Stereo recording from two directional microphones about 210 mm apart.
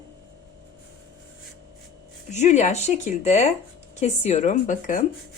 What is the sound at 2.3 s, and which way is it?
Speech, 35° left (ahead or behind).